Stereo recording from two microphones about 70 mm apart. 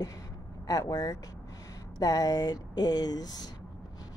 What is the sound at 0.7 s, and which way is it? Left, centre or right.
Speech, left.